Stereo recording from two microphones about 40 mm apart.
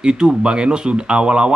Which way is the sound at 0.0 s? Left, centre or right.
Right.